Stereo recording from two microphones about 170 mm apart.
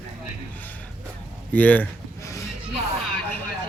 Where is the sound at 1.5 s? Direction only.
10° left (ahead or behind).